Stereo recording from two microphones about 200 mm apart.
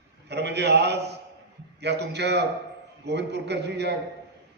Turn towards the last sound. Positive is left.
turn(degrees=-60)  # may be behind; listen again after turning